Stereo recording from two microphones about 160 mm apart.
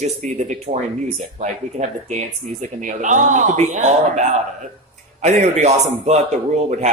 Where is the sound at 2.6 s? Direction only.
50° right (ahead or behind).